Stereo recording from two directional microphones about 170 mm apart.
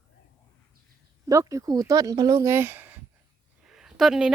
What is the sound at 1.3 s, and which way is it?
Speech, 20° right (ahead or behind).